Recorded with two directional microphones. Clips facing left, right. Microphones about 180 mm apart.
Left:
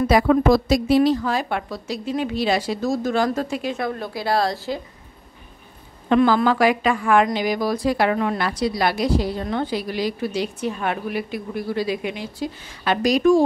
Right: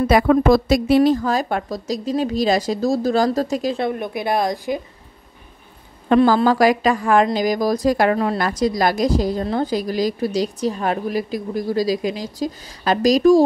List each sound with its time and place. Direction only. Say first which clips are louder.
0.1 s a woman's voice: right 2 dB; 55° right (ahead or behind); by 3.9 s 35° right (ahead or behind)
3.9 s speech: right 2 dB; 20° right (ahead or behind)
6.0 s a woman's voice: right 2 dB; 40° right (ahead or behind)